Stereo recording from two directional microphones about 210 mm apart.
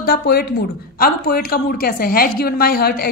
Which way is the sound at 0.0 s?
50° left (ahead or behind).